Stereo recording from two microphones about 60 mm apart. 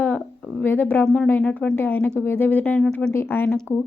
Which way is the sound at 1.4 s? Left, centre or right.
Centre.